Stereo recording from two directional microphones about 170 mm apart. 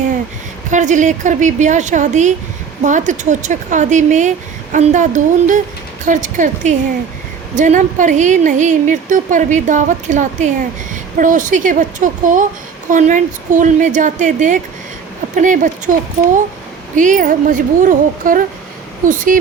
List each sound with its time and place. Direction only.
0.7 s speech: 45° right (ahead or behind)
16.9 s speech: 50° right (ahead or behind)